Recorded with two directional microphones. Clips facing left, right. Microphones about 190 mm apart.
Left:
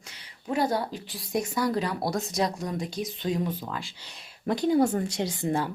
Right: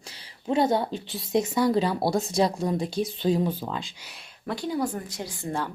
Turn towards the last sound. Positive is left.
turn(degrees=20)  # may be behind; listen again after turning